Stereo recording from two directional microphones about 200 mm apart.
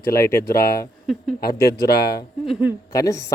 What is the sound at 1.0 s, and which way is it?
Speech, centre (ahead or behind).